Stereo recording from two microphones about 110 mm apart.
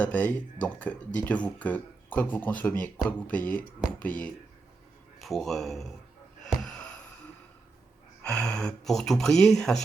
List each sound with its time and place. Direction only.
0.0 s speech: 15° left (ahead or behind)
5.2 s speech: centre (ahead or behind)
6.4 s gasp: 5° left (ahead or behind)
8.2 s speech: 5° left (ahead or behind)